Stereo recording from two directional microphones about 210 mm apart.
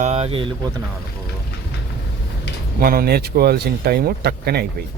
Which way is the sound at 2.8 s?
45° right (ahead or behind).